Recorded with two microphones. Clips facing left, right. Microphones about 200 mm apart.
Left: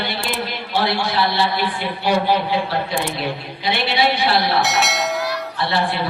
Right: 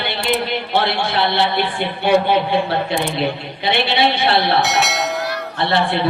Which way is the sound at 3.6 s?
25° right (ahead or behind).